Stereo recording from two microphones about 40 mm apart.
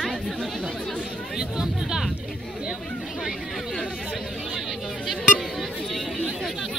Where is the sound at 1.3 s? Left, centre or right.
Centre.